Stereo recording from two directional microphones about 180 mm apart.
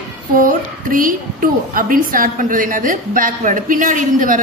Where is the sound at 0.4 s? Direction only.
50° right (ahead or behind).